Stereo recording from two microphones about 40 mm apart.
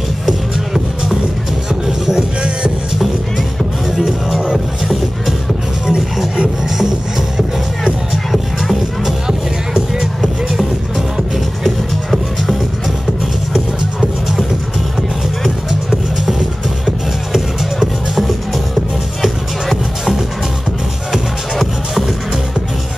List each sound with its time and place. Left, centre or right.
1.7 s music: centre
3.9 s music: centre
5.9 s music: centre
8.3 s music: centre
10.2 s music: centre
16.8 s music: centre